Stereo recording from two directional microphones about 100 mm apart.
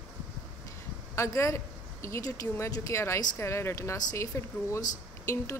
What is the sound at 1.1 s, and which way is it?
Speech, 30° left (ahead or behind).